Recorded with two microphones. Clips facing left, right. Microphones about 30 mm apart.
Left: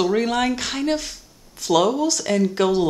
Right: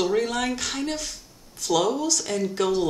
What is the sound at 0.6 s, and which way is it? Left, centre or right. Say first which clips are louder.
A woman's voice: left 5 dB; left.